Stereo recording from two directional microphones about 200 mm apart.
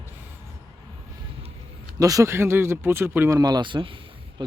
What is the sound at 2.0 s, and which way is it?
Speech, 15° right (ahead or behind).